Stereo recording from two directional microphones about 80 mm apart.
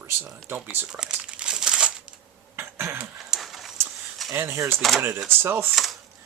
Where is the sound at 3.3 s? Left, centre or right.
Centre.